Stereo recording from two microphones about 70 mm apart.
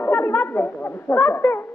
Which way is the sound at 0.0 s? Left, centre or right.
Left.